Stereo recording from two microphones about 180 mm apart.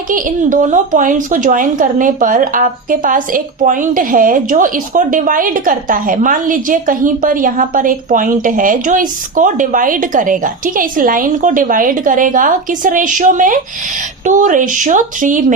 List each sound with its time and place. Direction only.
0.1 s a woman's voice: 45° right (ahead or behind)